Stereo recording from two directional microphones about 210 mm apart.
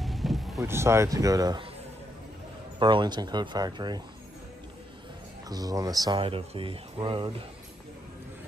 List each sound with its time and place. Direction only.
0.0 s vehicle: centre (ahead or behind)
0.6 s speech: 10° right (ahead or behind)
2.8 s speech: 20° right (ahead or behind)
5.5 s speech: 20° right (ahead or behind)